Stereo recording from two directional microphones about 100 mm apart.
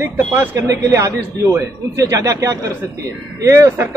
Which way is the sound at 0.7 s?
35° right (ahead or behind).